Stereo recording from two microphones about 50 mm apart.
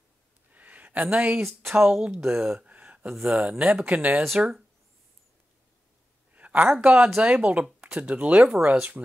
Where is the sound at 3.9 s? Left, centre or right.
Right.